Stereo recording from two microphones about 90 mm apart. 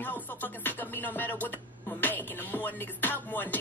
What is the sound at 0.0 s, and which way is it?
Music, 20° left (ahead or behind).